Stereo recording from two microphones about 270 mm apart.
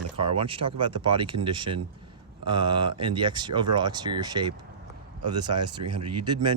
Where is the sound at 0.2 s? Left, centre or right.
Centre.